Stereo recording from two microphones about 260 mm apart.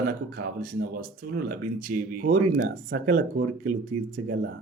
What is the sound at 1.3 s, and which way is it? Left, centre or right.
Speech, right.